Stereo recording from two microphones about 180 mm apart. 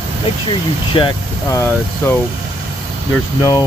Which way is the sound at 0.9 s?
30° left (ahead or behind).